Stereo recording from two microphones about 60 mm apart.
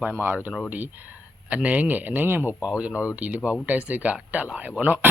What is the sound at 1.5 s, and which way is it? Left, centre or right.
Speech, right.